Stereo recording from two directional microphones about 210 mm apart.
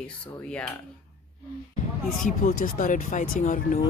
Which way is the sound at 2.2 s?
40° left (ahead or behind).